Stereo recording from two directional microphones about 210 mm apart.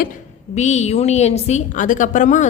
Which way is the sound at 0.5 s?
35° left (ahead or behind).